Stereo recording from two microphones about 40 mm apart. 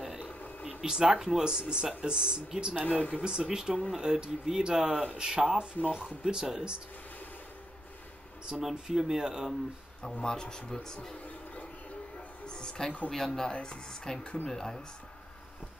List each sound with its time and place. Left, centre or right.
0.0 s a sound: centre
0.3 s a sound: left
0.7 s speech: right
8.5 s speech: centre
10.2 s speech: centre
12.4 s a sound: centre
13.1 s speech: centre
13.5 s speech: left
14.5 s speech: centre